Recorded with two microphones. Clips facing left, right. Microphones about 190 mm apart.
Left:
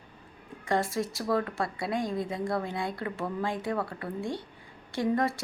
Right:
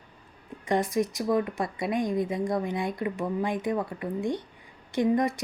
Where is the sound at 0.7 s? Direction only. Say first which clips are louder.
Right 3 dB; 20° right (ahead or behind).